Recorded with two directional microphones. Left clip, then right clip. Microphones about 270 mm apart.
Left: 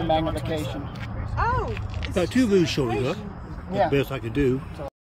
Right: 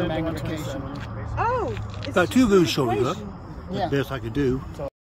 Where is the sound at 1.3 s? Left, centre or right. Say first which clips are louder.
Right 1 dB; right.